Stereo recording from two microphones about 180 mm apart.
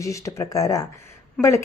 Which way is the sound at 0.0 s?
15° left (ahead or behind).